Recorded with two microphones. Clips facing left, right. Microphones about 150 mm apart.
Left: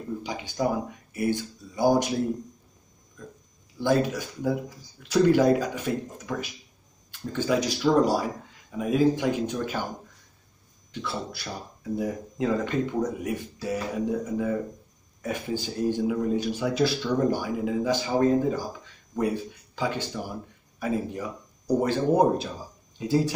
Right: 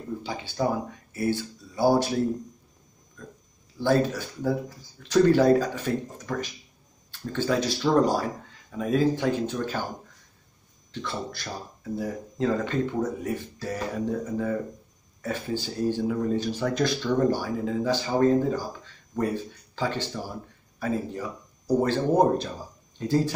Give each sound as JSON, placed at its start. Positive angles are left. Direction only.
{"t": 0.2, "sound": "speech", "side_deg": 15}
{"t": 3.8, "sound": "speech", "side_deg": 10}
{"t": 10.9, "sound": "speech", "side_deg": 10}